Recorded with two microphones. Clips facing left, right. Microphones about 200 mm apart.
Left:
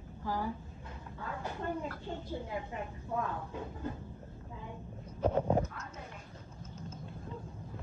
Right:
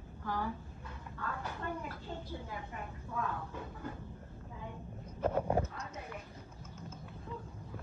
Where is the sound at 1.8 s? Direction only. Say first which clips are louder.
Left 4 dB; 10° right (ahead or behind).